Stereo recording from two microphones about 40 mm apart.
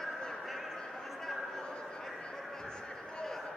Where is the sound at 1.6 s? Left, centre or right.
Left.